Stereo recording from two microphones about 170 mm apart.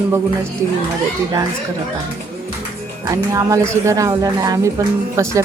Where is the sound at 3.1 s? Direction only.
20° right (ahead or behind).